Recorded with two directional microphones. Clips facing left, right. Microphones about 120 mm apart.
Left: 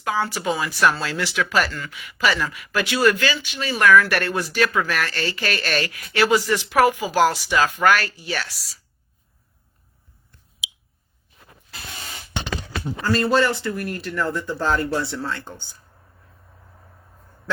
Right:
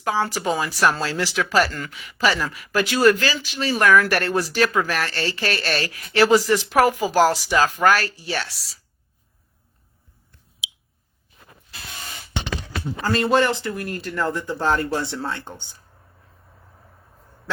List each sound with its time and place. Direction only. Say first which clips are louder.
0.0 s speech: right 1 dB; 35° right (ahead or behind)
13.1 s speech: even; 20° right (ahead or behind)